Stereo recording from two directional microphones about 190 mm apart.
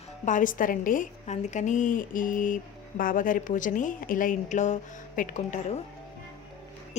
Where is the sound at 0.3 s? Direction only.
45° left (ahead or behind).